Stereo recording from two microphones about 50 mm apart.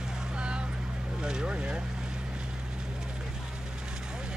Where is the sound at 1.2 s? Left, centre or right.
Centre.